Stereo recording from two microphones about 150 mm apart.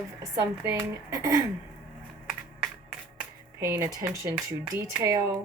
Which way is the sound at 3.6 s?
15° right (ahead or behind).